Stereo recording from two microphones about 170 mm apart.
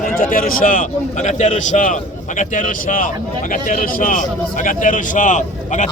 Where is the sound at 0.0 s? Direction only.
55° left (ahead or behind).